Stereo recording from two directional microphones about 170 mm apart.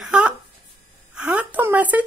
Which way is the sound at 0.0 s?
5° right (ahead or behind).